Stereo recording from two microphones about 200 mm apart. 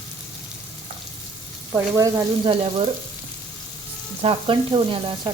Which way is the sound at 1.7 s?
15° right (ahead or behind).